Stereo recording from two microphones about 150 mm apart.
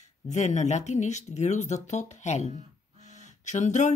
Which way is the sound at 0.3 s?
50° left (ahead or behind).